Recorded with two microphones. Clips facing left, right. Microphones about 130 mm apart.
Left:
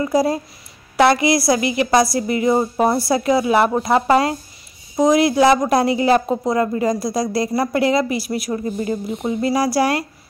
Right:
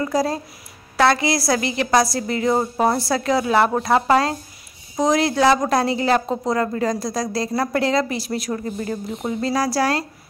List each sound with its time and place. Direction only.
0.0 s speech: 10° left (ahead or behind)